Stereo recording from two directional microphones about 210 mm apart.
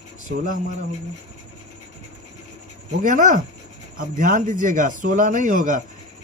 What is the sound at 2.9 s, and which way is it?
A man's voice, 35° right (ahead or behind).